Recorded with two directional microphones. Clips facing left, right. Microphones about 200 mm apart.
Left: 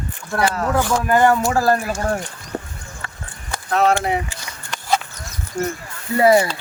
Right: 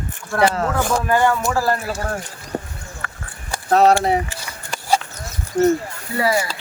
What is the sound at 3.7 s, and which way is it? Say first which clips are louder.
Speech: right 4 dB; 40° right (ahead or behind).